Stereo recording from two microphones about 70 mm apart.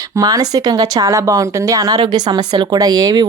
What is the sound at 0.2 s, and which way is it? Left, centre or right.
A woman's voice, right.